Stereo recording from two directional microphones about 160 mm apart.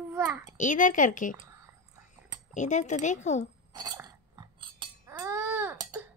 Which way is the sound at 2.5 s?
50° left (ahead or behind).